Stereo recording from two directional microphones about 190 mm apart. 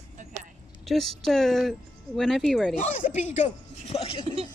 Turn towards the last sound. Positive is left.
turn(degrees=30)  # may be behind; listen again after turning